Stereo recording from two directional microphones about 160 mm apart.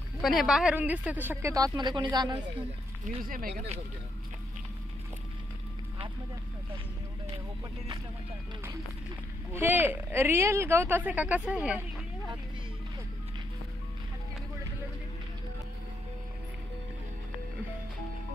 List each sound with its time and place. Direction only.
0.2 s a woman's voice: centre (ahead or behind); by 2.4 s 25° right (ahead or behind)
3.3 s speech: 60° right (ahead or behind)
9.6 s a woman's voice: 10° right (ahead or behind)